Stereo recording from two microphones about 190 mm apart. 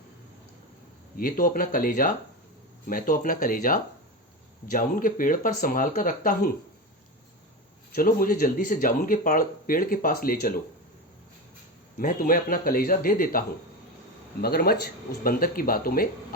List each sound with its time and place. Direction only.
1.1 s speech: 50° left (ahead or behind)
7.9 s speech: 45° left (ahead or behind)
11.9 s speech: 45° left (ahead or behind)
14.4 s speech: 55° left (ahead or behind)